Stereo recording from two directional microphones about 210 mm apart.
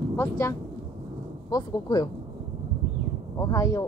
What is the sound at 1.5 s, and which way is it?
Speech, 20° left (ahead or behind).